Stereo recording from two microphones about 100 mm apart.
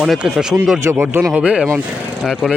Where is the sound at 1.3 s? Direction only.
10° right (ahead or behind).